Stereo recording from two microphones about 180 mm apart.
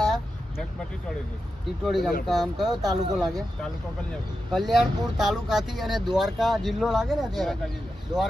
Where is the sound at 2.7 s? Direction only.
20° right (ahead or behind).